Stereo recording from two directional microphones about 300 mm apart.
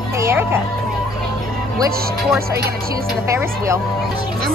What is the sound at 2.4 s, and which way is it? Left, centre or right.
Music, right.